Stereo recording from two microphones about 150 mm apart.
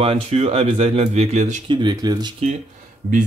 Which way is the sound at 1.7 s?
30° right (ahead or behind).